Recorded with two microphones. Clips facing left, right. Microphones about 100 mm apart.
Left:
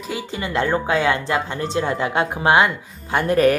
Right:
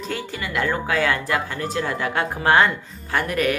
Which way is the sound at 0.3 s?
25° left (ahead or behind).